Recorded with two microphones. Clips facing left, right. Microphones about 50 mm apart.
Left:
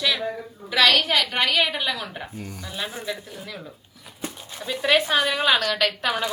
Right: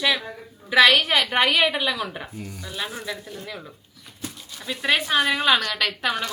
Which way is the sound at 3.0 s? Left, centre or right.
Centre.